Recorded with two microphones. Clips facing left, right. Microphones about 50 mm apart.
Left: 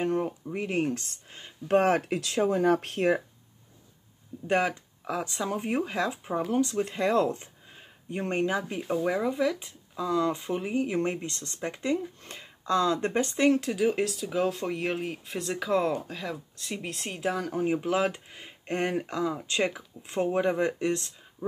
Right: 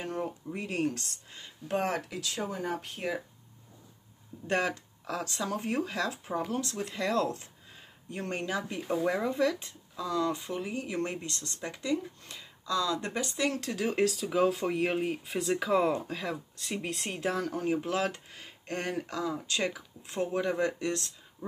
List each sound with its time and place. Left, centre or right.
0.0 s speech: left
1.7 s speech: left
4.5 s speech: centre
8.9 s speech: centre; by 13.6 s left
13.6 s speech: centre